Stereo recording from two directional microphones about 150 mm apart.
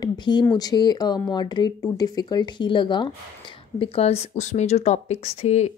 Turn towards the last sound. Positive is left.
turn(degrees=50)  # may be behind; listen again after turning